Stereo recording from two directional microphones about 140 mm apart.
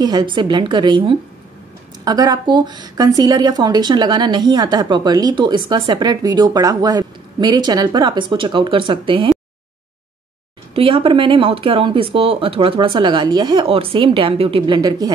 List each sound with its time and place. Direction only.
0.0 s speech: 30° right (ahead or behind)
10.7 s speech: 40° right (ahead or behind)
14.8 s speech: 30° right (ahead or behind)